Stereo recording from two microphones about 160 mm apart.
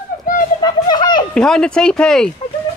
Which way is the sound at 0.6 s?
25° left (ahead or behind).